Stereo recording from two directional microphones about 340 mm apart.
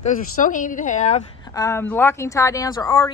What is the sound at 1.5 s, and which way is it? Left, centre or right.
A woman's voice, centre.